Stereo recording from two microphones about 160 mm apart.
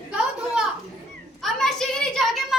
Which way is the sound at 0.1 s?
5° right (ahead or behind).